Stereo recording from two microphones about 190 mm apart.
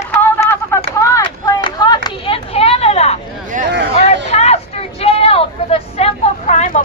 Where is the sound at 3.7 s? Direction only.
65° right (ahead or behind).